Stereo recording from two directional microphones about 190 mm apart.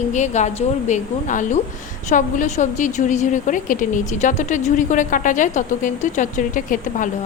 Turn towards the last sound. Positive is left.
turn(degrees=45)  # may be behind; listen again after turning